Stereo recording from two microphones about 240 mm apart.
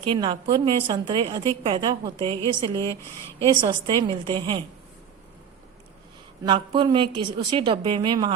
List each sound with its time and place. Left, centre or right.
0.0 s a woman's voice: right
6.4 s a woman's voice: centre